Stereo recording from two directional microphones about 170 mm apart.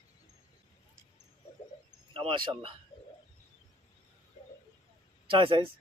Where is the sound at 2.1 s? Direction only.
30° right (ahead or behind).